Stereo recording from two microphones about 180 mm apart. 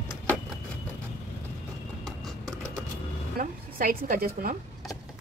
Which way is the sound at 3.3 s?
55° right (ahead or behind).